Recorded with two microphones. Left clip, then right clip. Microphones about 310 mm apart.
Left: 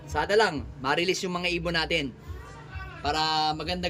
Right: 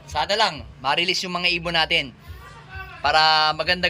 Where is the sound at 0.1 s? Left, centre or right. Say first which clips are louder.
Right 2 dB; centre.